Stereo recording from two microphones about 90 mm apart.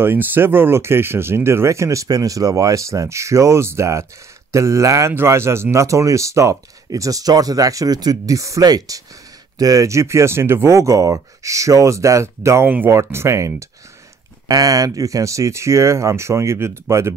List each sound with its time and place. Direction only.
0.0 s speech: 25° right (ahead or behind)
12.6 s speech: 25° right (ahead or behind)
14.5 s speech: 40° right (ahead or behind)